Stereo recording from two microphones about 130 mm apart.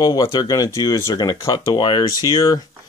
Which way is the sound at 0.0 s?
30° left (ahead or behind).